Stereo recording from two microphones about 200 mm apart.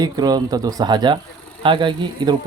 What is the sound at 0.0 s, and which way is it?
Speech, 20° right (ahead or behind).